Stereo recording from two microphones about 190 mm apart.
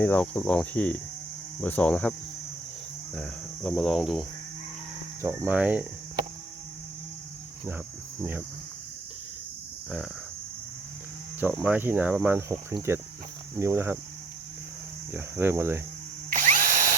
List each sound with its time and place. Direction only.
0.0 s cricket: 10° left (ahead or behind)
3.2 s cricket: centre (ahead or behind)
5.2 s speech: 10° right (ahead or behind)
11.3 s speech: 10° right (ahead or behind)
15.1 s speech: 10° right (ahead or behind)
16.3 s drill: 45° right (ahead or behind)